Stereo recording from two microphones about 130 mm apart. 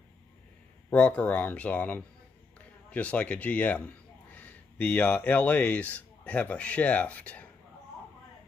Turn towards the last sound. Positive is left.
turn(degrees=10)  # may be behind; listen again after turning